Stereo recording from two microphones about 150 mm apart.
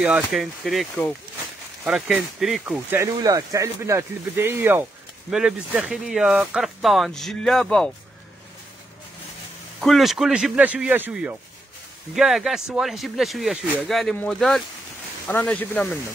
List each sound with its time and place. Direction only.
0.0 s speech: 5° right (ahead or behind)
2.9 s speech: 20° right (ahead or behind); by 7.9 s 5° left (ahead or behind)
9.8 s speech: centre (ahead or behind)